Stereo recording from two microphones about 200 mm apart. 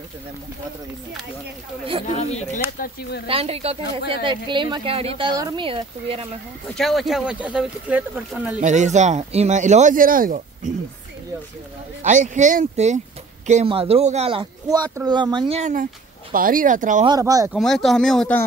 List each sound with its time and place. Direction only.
2.0 s speech: 35° left (ahead or behind)
2.8 s speech: 55° left (ahead or behind)
3.3 s a man's voice: 30° right (ahead or behind)
6.7 s speech: centre (ahead or behind)
8.5 s speech: 35° right (ahead or behind)
12.0 s a man's voice: 40° right (ahead or behind)
17.0 s speech: 20° right (ahead or behind)
17.5 s speech: centre (ahead or behind)